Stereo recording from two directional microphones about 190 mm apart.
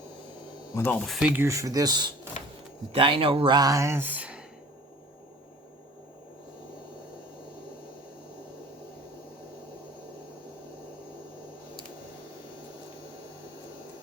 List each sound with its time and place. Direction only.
0.8 s speech: 10° left (ahead or behind); by 4.4 s 5° right (ahead or behind)